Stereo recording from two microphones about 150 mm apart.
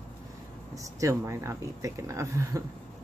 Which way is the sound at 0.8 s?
20° right (ahead or behind).